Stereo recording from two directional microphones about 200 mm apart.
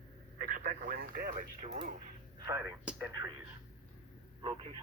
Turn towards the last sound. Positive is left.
turn(degrees=-25)  # may be behind; listen again after turning